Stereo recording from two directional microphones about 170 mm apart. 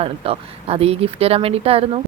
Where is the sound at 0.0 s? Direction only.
35° right (ahead or behind).